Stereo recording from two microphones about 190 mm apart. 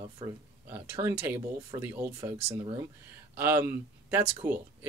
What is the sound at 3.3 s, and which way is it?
Speech, 10° right (ahead or behind).